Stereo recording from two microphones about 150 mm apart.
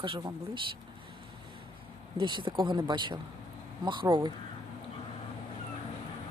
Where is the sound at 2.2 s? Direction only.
35° right (ahead or behind).